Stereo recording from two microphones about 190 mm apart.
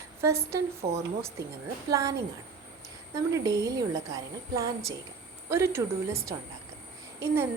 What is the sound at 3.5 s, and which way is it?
A woman's voice, 15° right (ahead or behind).